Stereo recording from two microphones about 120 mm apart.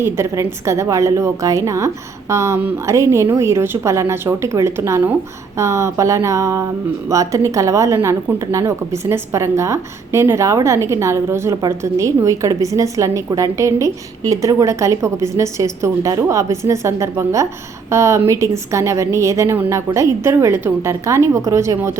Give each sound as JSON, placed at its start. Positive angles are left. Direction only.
{"t": 0.0, "sound": "a woman's voice", "side_deg": -20}